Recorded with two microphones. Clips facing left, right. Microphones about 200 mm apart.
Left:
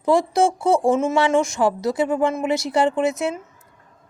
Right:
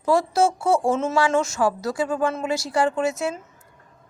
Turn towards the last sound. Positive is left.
turn(degrees=20)  # may be behind; listen again after turning